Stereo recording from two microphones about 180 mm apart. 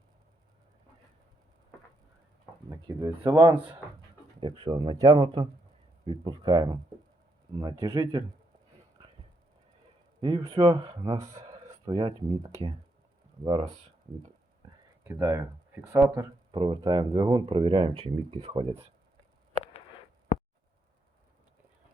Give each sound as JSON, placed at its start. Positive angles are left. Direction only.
{"t": 2.6, "sound": "speech", "side_deg": -20}
{"t": 4.4, "sound": "speech", "side_deg": -30}
{"t": 10.2, "sound": "speech", "side_deg": -30}
{"t": 15.0, "sound": "speech", "side_deg": -15}
{"t": 16.5, "sound": "speech", "side_deg": -25}